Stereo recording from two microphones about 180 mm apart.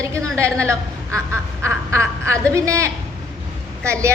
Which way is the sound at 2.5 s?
15° right (ahead or behind).